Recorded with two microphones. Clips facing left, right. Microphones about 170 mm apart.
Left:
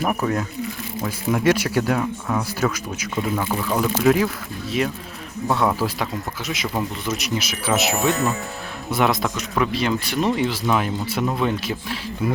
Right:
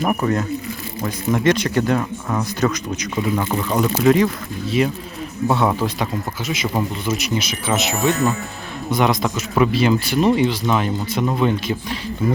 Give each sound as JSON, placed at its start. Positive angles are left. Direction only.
{"t": 0.0, "sound": "speech", "side_deg": 0}